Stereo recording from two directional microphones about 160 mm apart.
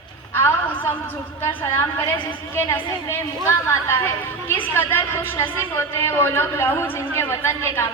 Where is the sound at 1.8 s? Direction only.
15° left (ahead or behind).